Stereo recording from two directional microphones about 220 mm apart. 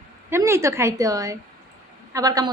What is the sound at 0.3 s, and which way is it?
Speech, 10° right (ahead or behind).